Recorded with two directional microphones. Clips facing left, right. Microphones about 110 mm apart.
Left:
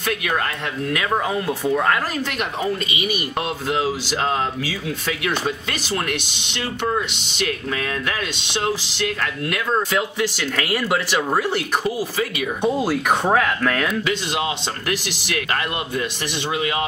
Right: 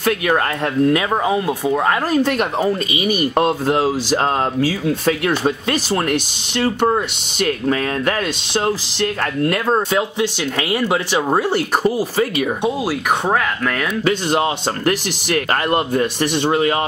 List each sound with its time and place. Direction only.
0.8 s speech: 25° right (ahead or behind)
1.7 s speech: 30° right (ahead or behind)
9.9 s speech: 25° right (ahead or behind); by 12.4 s 40° right (ahead or behind)
12.6 s speech: 5° right (ahead or behind)
14.0 s speech: 45° right (ahead or behind)